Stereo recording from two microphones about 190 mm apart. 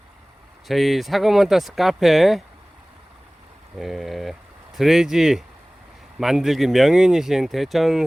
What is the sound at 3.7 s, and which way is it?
Speech, centre (ahead or behind).